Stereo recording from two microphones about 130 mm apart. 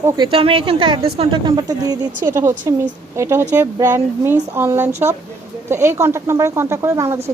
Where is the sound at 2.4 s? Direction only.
20° right (ahead or behind).